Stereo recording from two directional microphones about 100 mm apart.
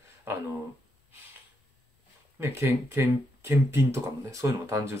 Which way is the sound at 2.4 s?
25° right (ahead or behind).